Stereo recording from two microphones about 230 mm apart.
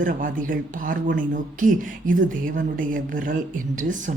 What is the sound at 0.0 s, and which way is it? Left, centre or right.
Speech, right.